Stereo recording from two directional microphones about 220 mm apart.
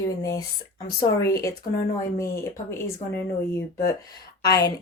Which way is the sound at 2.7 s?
10° left (ahead or behind).